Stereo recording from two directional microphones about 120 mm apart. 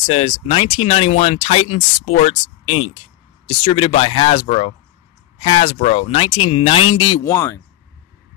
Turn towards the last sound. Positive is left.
turn(degrees=25)  # may be behind; listen again after turning